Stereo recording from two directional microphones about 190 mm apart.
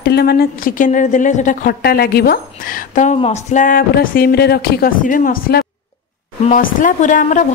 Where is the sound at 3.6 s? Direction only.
50° left (ahead or behind).